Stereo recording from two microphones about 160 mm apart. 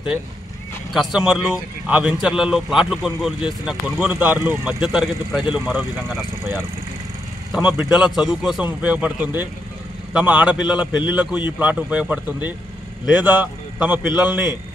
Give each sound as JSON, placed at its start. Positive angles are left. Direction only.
{"t": 0.9, "sound": "a man's voice", "side_deg": -5}